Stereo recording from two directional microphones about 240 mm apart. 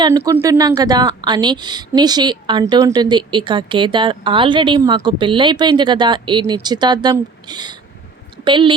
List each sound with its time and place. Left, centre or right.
0.0 s a woman's voice: centre